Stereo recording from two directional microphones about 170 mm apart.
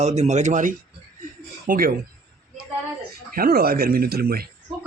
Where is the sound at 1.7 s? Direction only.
60° right (ahead or behind).